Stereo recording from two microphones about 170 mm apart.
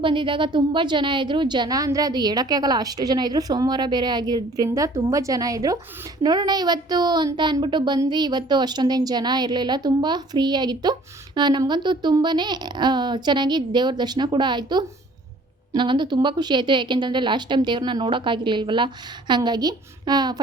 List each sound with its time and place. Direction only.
0.0 s a woman's voice: 30° right (ahead or behind)